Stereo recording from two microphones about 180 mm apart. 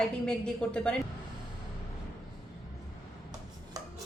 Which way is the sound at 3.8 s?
20° right (ahead or behind).